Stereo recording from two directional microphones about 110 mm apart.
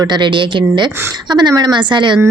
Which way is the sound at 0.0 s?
45° right (ahead or behind).